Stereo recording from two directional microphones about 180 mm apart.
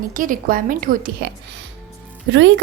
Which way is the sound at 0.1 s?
50° right (ahead or behind).